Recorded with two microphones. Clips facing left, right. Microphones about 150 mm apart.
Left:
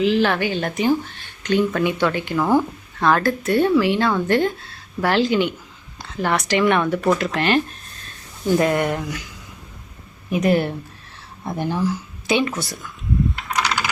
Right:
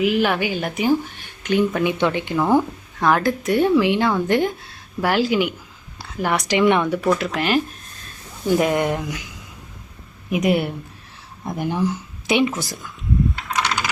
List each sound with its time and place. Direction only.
0.0 s speech: 10° right (ahead or behind)
7.1 s speech: centre (ahead or behind)
8.4 s speech: 15° right (ahead or behind)
10.4 s speech: 10° right (ahead or behind)
13.4 s computer keyboard: centre (ahead or behind)